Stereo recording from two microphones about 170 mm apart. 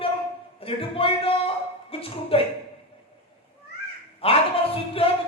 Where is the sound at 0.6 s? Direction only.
35° left (ahead or behind).